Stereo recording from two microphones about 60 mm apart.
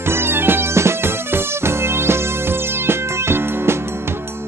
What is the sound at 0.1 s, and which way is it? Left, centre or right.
Music, right.